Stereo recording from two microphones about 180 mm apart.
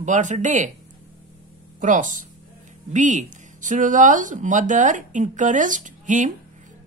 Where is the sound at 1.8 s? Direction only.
45° right (ahead or behind).